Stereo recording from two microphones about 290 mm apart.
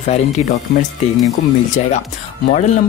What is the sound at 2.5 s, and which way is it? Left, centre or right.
Speech, left.